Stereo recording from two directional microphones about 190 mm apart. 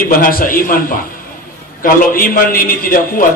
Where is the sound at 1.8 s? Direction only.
45° left (ahead or behind).